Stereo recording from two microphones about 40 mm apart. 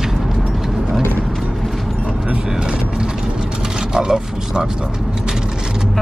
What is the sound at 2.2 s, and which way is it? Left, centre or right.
Vehicle, centre.